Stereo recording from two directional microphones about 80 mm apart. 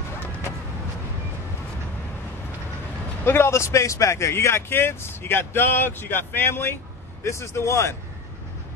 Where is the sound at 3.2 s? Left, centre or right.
Left.